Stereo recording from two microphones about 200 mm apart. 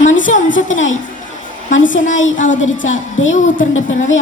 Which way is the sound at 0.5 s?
75° left (ahead or behind).